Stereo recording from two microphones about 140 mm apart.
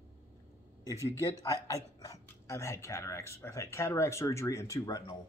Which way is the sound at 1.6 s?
25° left (ahead or behind).